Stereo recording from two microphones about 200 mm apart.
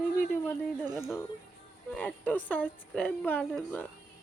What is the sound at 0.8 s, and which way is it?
Speech, 20° right (ahead or behind).